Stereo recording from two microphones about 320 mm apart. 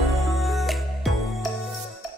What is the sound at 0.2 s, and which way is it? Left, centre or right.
Music, centre.